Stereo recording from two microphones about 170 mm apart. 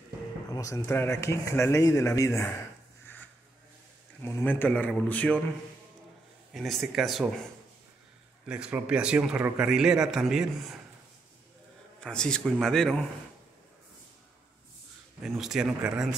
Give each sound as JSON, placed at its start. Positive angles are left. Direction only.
{"t": 0.5, "sound": "speech", "side_deg": 20}
{"t": 4.2, "sound": "speech", "side_deg": 15}
{"t": 6.5, "sound": "a man's voice", "side_deg": 0}
{"t": 8.5, "sound": "a man's voice", "side_deg": -5}
{"t": 12.0, "sound": "a man's voice", "side_deg": 5}
{"t": 15.2, "sound": "a man's voice", "side_deg": 0}